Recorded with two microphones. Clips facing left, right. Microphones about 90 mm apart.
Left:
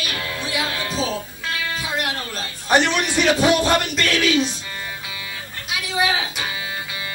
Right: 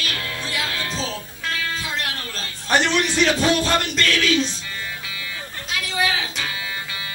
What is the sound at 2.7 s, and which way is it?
A man's voice, 10° left (ahead or behind).